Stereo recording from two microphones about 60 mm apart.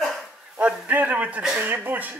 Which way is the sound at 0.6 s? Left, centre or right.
Right.